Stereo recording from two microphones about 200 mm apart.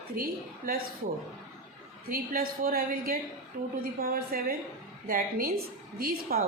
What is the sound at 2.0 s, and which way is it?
A woman's voice, 45° right (ahead or behind).